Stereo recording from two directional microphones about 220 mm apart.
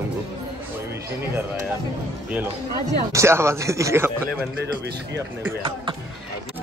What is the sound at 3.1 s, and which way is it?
Speech, 10° right (ahead or behind).